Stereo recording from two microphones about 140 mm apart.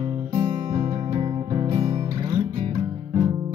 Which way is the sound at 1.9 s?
25° right (ahead or behind).